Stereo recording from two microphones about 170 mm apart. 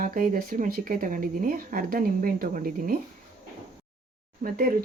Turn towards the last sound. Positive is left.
turn(degrees=-55)  # may be behind; listen again after turning